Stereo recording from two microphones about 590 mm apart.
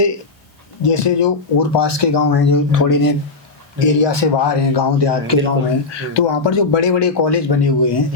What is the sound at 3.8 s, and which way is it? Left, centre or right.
Speech, left.